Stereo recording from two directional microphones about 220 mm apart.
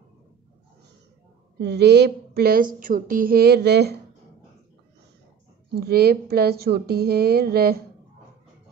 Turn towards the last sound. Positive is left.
turn(degrees=-45)  # may be behind; listen again after turning